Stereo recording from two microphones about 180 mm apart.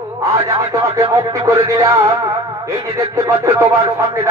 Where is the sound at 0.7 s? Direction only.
20° right (ahead or behind).